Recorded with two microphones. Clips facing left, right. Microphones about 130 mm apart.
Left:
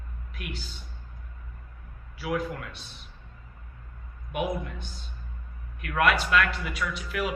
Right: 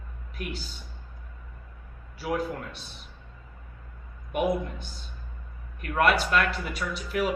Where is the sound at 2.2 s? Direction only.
35° right (ahead or behind).